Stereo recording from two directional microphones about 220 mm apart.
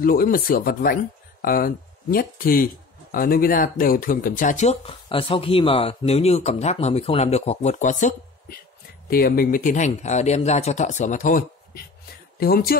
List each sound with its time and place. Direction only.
0.0 s speech: 40° left (ahead or behind)